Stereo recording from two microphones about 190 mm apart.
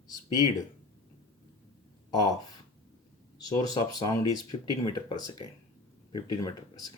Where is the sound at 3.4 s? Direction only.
20° left (ahead or behind).